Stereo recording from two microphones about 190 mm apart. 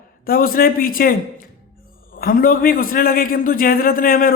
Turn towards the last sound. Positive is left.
turn(degrees=50)  # may be behind; listen again after turning